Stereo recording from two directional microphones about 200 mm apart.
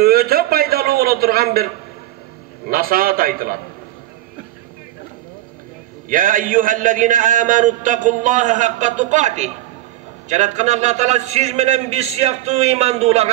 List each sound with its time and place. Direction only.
0.0 s a sound: 50° right (ahead or behind)
2.6 s a man's voice: 45° right (ahead or behind)
6.0 s a man's voice: 40° right (ahead or behind)